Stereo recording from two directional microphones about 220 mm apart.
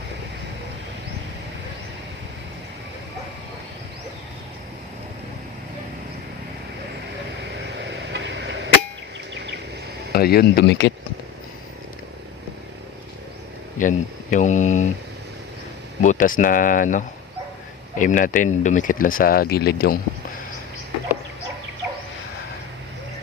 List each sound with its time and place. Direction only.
7.8 s a sound: 55° right (ahead or behind)
10.1 s speech: 45° left (ahead or behind)
13.7 s speech: 35° left (ahead or behind)
16.0 s speech: 35° left (ahead or behind)